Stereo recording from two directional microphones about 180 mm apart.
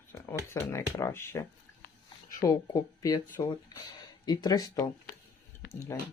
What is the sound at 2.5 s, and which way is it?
Speech, 20° left (ahead or behind).